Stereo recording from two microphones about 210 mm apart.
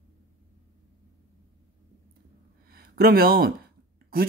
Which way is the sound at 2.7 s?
45° right (ahead or behind).